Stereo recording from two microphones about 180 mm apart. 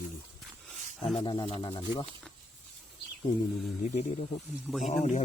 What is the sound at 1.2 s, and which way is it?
Speech, 25° left (ahead or behind).